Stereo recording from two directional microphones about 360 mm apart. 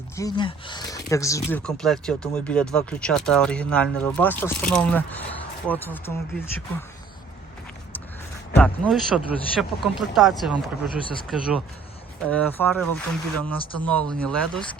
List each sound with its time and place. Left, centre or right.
0.2 s speech: centre
8.5 s speech: centre